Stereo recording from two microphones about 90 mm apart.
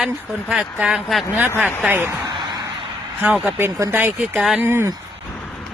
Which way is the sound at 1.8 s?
25° right (ahead or behind).